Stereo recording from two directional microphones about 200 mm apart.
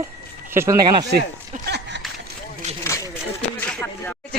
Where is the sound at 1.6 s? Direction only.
55° right (ahead or behind).